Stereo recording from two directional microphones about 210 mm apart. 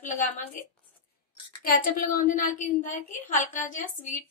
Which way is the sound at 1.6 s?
40° left (ahead or behind).